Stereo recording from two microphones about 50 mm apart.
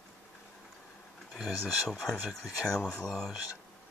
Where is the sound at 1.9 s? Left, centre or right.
Centre.